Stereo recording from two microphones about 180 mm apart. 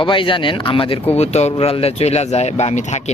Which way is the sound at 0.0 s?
30° left (ahead or behind).